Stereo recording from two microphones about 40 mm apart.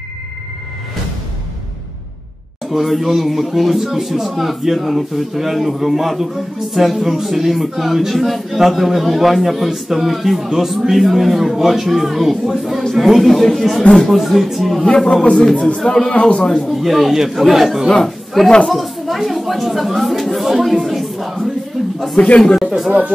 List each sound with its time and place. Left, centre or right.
2.7 s speech: centre
14.2 s speech: centre
15.8 s a man's voice: centre
16.4 s speech: centre
16.7 s speech: centre
18.0 s chatter: centre
18.7 s speech: centre
22.2 s a man's voice: left
22.6 s speech: centre
22.8 s speech: right